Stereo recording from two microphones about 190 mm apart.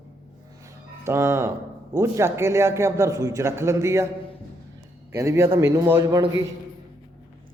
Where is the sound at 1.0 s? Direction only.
15° right (ahead or behind).